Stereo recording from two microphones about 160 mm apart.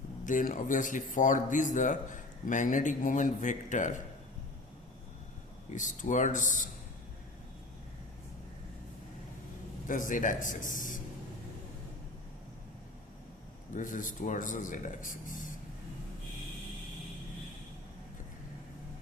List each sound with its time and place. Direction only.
0.3 s speech: 55° left (ahead or behind)
5.7 s speech: 50° left (ahead or behind)
9.8 s speech: 55° left (ahead or behind)
13.7 s speech: 55° left (ahead or behind)